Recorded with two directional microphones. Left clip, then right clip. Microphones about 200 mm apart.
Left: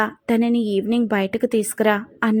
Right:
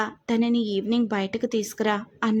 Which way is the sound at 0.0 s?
15° left (ahead or behind).